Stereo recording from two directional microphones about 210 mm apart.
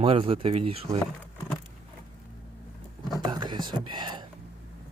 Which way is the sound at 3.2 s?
20° right (ahead or behind).